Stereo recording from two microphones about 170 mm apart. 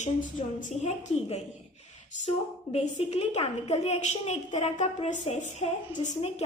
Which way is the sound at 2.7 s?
40° left (ahead or behind).